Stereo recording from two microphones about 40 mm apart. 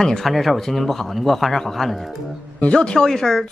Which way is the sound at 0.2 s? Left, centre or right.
Centre.